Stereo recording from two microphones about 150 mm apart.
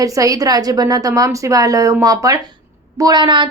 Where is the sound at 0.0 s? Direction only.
20° right (ahead or behind).